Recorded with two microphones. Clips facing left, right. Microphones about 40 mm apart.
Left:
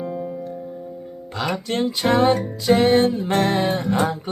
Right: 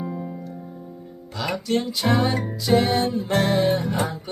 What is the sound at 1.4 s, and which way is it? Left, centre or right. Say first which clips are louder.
Music: left 1 dB; left.